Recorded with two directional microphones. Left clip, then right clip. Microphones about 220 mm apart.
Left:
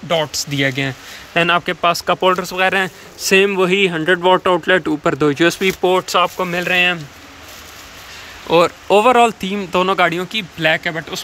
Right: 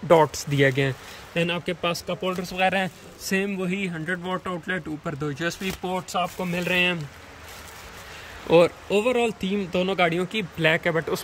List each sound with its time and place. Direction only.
0.1 s speech: 15° right (ahead or behind)
3.3 s speech: 30° left (ahead or behind)
6.3 s speech: 5° right (ahead or behind)
8.5 s speech: 10° right (ahead or behind)